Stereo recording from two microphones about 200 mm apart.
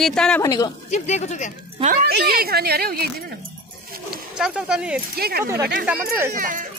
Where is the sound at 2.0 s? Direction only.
50° right (ahead or behind).